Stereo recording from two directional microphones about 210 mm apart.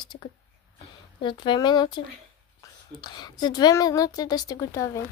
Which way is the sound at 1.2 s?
20° left (ahead or behind).